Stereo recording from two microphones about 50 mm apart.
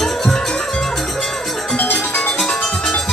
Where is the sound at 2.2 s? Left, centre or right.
Centre.